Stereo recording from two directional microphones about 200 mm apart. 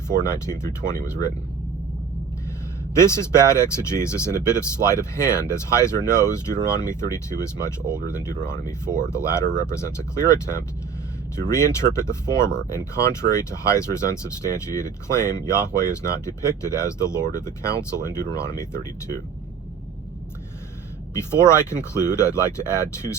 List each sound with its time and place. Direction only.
0.1 s speech: 45° right (ahead or behind)
0.4 s speech: 15° left (ahead or behind)
3.0 s speech: 15° left (ahead or behind)
21.2 s speech: 15° left (ahead or behind)